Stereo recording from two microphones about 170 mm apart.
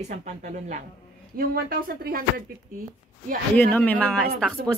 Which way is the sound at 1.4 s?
60° right (ahead or behind).